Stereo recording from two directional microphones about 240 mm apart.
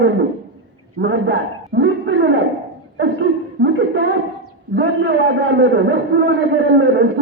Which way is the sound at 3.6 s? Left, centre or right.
Right.